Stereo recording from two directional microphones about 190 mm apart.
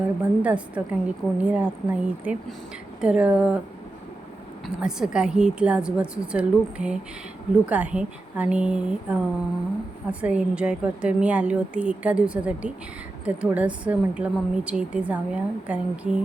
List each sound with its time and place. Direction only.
0.0 s a woman's voice: 5° right (ahead or behind)
4.6 s a woman's voice: 5° right (ahead or behind)